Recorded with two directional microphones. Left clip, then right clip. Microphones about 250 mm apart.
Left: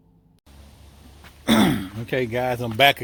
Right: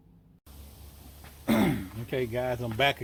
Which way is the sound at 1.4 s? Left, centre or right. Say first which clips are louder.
Left 7 dB; left.